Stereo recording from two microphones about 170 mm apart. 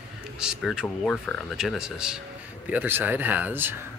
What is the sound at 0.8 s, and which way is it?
Speech, 10° left (ahead or behind).